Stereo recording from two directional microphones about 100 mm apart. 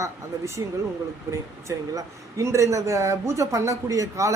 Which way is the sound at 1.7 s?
30° right (ahead or behind).